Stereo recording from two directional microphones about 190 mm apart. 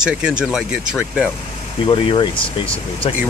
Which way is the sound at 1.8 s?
25° left (ahead or behind).